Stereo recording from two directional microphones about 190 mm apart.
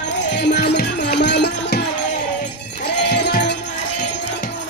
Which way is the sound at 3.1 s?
60° left (ahead or behind).